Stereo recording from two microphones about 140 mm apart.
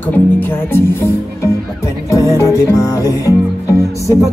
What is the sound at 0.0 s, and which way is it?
Speech, 10° left (ahead or behind).